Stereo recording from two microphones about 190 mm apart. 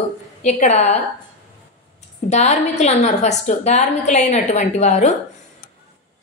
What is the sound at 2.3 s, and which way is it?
A woman's voice, 40° left (ahead or behind).